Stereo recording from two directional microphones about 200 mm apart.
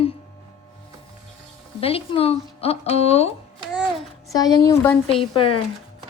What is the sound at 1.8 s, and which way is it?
Speech, 30° left (ahead or behind).